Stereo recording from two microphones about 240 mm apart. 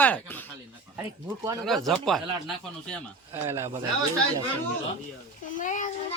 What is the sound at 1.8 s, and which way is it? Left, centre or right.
Speech, centre.